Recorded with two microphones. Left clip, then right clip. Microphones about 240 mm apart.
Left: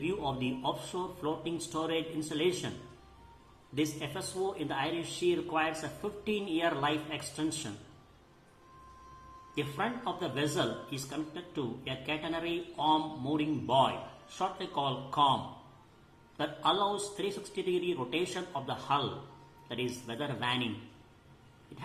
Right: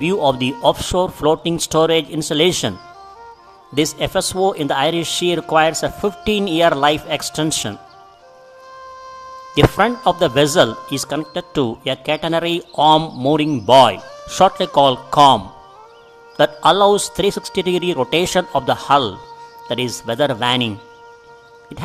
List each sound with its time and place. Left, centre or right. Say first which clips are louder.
0.0 s speech: right 18 dB; right
3.8 s speech: right 17 dB; right
9.7 s speech: right 19 dB; right
16.4 s speech: right 18 dB; right